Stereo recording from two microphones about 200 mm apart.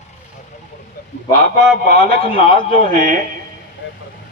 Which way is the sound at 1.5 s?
30° left (ahead or behind).